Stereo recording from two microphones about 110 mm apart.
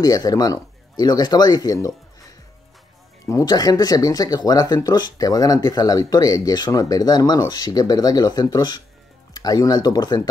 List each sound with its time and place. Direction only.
0.0 s speech: 35° left (ahead or behind)
3.3 s speech: 35° left (ahead or behind)